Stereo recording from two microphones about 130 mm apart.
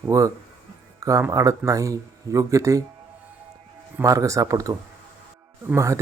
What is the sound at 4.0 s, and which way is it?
A man's voice, 25° right (ahead or behind).